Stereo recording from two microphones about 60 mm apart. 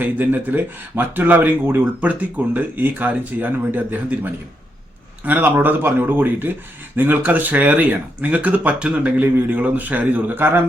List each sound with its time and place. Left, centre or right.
0.0 s speech: right